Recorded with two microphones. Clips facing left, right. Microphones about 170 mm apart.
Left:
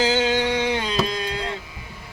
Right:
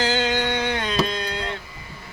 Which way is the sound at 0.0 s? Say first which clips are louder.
Left 2 dB; 5° left (ahead or behind).